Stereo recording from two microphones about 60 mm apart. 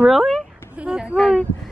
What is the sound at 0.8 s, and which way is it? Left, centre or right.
Speech, centre.